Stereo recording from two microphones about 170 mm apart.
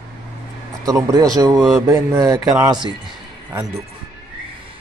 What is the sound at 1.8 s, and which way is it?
Speech, 15° right (ahead or behind).